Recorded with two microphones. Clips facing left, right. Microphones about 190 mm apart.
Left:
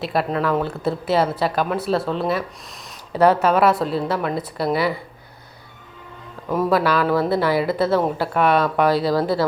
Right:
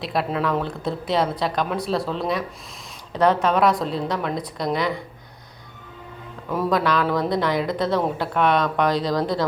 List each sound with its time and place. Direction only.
0.0 s speech: centre (ahead or behind)
6.5 s speech: 5° left (ahead or behind)